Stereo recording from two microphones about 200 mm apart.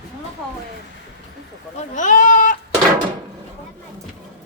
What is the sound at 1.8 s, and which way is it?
Speech, 40° left (ahead or behind).